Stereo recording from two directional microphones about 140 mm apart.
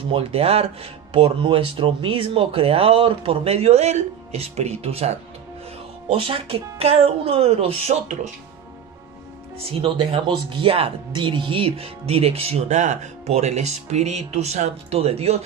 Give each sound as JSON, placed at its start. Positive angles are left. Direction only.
{"t": 0.1, "sound": "speech", "side_deg": -45}
{"t": 9.6, "sound": "speech", "side_deg": -45}